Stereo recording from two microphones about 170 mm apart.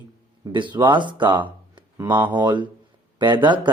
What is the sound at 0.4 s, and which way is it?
Speech, 25° right (ahead or behind).